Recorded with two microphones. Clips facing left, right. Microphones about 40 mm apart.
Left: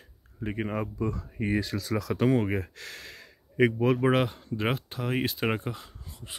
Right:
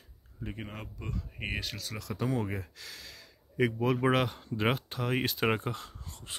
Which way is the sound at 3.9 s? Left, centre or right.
Centre.